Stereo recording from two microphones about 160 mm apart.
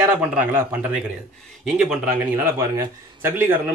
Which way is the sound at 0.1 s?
10° right (ahead or behind).